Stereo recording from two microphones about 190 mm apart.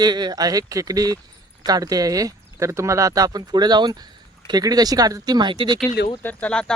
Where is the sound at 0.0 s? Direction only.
20° right (ahead or behind).